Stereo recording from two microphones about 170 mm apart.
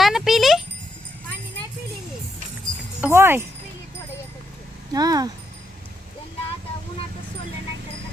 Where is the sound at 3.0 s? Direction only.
15° right (ahead or behind).